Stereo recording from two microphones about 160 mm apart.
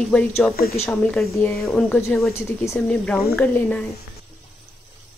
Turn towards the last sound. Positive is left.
turn(degrees=10)  # may be behind; listen again after turning